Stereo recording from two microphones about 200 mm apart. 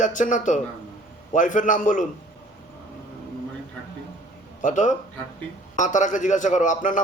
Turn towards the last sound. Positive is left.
turn(degrees=40)  # may be behind; listen again after turning